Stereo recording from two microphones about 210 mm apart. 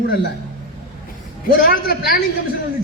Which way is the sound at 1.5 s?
45° left (ahead or behind).